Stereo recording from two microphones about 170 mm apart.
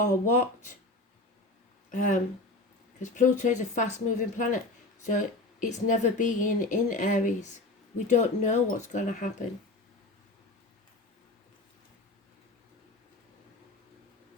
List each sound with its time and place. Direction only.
0.0 s speech: 50° left (ahead or behind)
1.9 s speech: 45° left (ahead or behind)